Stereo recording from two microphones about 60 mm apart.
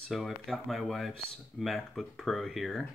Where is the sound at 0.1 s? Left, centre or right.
Centre.